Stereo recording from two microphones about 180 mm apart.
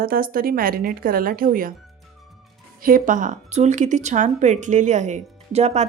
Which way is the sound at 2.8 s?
50° right (ahead or behind).